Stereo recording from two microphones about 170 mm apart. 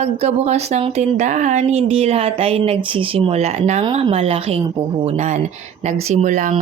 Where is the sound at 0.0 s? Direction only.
40° right (ahead or behind).